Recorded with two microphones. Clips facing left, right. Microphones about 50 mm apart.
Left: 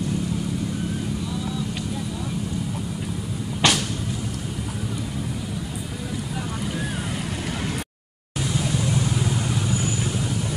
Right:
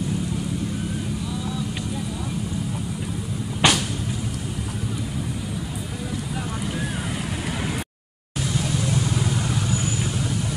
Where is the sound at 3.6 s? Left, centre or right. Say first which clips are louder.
Right 1 dB; centre.